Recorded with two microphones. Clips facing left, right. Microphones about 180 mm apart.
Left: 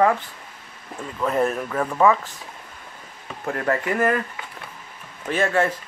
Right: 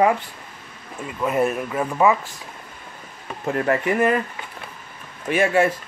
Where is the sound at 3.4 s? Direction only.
20° right (ahead or behind).